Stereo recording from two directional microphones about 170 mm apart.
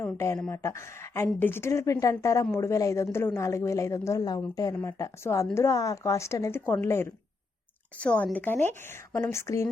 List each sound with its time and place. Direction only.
0.0 s speech: 15° left (ahead or behind)
0.3 s speech: 5° left (ahead or behind)
0.6 s speech: 15° left (ahead or behind)